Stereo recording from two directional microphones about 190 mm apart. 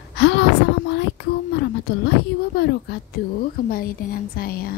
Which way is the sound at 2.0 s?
60° left (ahead or behind).